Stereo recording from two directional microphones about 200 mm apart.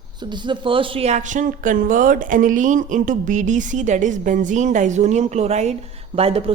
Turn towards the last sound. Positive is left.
turn(degrees=-30)  # may be behind; listen again after turning